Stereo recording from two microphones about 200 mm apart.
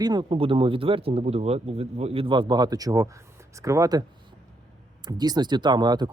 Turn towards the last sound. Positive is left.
turn(degrees=-20)  # may be behind; listen again after turning